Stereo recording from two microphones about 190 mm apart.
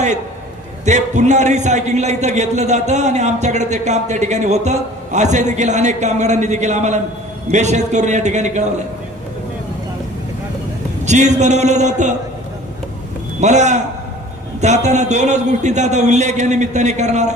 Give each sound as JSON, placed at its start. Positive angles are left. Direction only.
{"t": 0.9, "sound": "a man's voice", "side_deg": -40}
{"t": 11.0, "sound": "a man's voice", "side_deg": -40}
{"t": 13.4, "sound": "a man's voice", "side_deg": -40}